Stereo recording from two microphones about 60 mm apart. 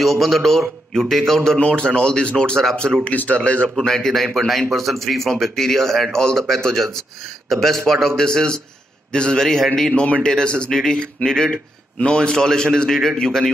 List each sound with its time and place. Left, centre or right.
0.0 s speech: centre
1.6 s speech: centre
3.7 s speech: centre